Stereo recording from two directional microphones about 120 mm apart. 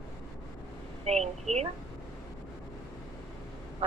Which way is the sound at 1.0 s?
65° right (ahead or behind).